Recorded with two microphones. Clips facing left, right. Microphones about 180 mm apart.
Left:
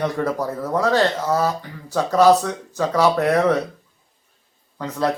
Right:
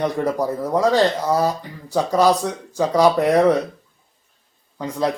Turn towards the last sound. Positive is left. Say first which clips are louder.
# right 1 dB
turn(degrees=-10)  # may be behind; listen again after turning